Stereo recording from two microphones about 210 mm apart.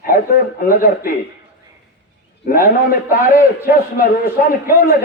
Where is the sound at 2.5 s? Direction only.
45° left (ahead or behind).